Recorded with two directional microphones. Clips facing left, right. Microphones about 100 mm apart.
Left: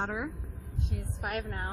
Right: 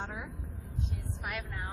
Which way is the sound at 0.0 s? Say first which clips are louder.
Left 7 dB; 60° left (ahead or behind).